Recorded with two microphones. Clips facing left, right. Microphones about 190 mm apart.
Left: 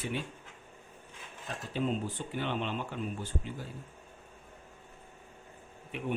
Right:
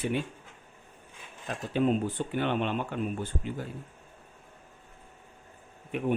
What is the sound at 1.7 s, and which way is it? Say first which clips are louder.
Speech: right 6 dB; 60° right (ahead or behind).